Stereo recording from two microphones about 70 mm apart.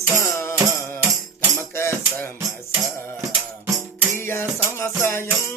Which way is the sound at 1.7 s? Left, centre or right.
Left.